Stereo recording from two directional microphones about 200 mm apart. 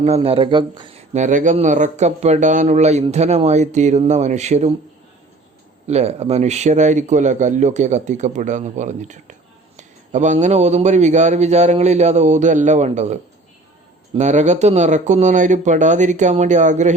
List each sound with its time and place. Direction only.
0.0 s speech: 30° right (ahead or behind)
5.9 s speech: 30° right (ahead or behind)
14.2 s speech: 35° right (ahead or behind)